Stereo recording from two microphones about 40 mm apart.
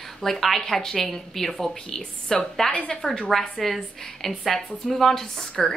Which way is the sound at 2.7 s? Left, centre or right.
Left.